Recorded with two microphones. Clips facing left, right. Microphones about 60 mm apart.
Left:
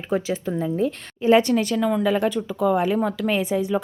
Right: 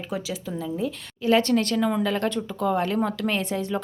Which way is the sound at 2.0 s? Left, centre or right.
Centre.